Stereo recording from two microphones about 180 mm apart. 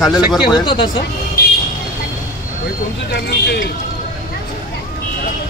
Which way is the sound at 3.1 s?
70° left (ahead or behind).